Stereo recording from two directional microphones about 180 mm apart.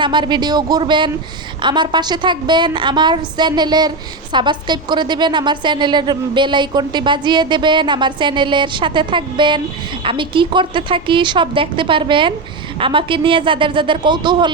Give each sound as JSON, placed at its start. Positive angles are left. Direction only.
{"t": 0.0, "sound": "a woman's voice", "side_deg": -25}